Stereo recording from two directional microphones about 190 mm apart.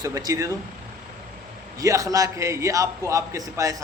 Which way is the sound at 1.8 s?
20° right (ahead or behind).